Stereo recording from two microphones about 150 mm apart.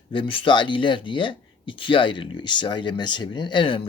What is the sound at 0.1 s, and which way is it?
Speech, 35° left (ahead or behind).